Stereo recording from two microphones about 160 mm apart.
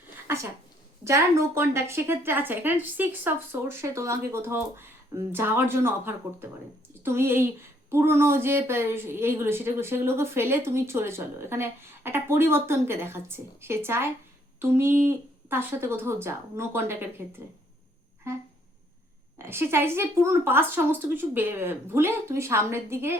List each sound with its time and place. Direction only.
1.0 s speech: 20° right (ahead or behind)
19.4 s speech: 15° right (ahead or behind)